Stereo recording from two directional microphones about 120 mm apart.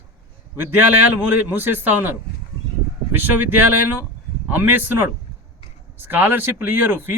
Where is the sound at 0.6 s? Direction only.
20° right (ahead or behind).